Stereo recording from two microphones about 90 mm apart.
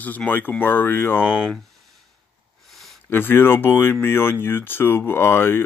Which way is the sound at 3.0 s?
25° left (ahead or behind).